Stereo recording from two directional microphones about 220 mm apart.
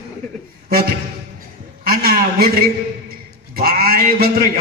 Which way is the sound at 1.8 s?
45° right (ahead or behind).